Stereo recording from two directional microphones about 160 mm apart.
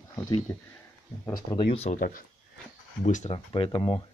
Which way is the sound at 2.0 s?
65° left (ahead or behind).